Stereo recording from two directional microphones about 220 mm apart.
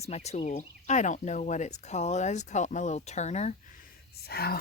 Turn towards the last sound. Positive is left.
turn(degrees=45)  # may be behind; listen again after turning